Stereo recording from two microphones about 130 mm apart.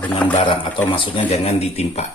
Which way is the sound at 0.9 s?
40° left (ahead or behind).